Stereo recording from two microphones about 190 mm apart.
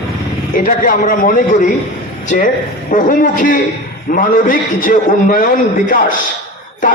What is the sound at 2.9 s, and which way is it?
A man's voice, 45° left (ahead or behind).